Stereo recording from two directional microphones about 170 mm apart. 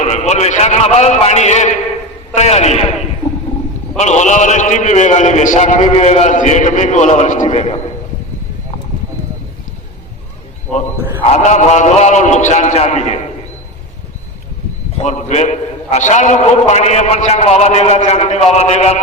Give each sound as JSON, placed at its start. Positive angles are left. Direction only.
{"t": 0.0, "sound": "a man's voice", "side_deg": 40}
{"t": 3.9, "sound": "a man's voice", "side_deg": 45}
{"t": 11.3, "sound": "a man's voice", "side_deg": 40}
{"t": 14.9, "sound": "a man's voice", "side_deg": 45}